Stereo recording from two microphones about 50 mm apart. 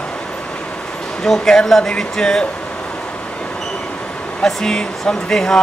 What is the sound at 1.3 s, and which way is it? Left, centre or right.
Speech, centre.